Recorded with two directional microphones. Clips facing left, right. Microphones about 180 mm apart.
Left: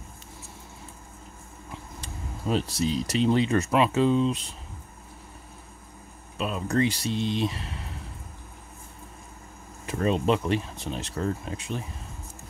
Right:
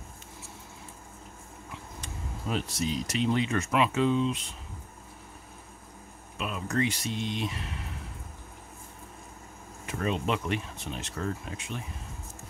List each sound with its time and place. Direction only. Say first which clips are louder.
2.0 s speech: left 1 dB; 35° left (ahead or behind)
6.3 s speech: left 4 dB; 35° left (ahead or behind)
9.8 s speech: left 6 dB; 35° left (ahead or behind)